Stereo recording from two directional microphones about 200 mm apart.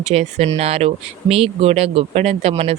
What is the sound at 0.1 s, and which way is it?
Speech, 30° right (ahead or behind).